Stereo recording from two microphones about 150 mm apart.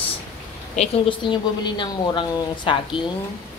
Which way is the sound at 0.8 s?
35° left (ahead or behind).